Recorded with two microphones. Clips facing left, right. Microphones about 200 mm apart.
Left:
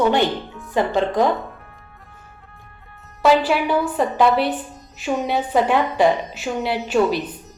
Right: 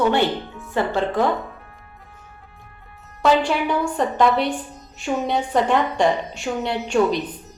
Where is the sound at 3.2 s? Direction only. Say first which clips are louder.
Left 2 dB; 5° left (ahead or behind).